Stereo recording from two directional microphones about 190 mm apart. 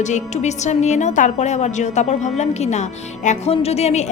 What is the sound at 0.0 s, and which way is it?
A woman's voice, 40° left (ahead or behind).